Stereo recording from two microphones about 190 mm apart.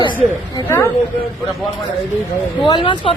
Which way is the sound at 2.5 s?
25° left (ahead or behind).